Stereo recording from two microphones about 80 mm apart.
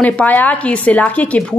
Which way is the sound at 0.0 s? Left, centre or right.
Left.